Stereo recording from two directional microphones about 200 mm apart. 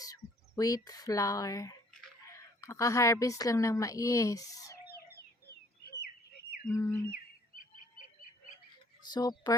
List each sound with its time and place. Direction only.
0.0 s a woman's voice: 15° left (ahead or behind)
4.9 s chicken: 50° left (ahead or behind)
6.7 s bird: 15° left (ahead or behind)
9.0 s speech: 20° left (ahead or behind)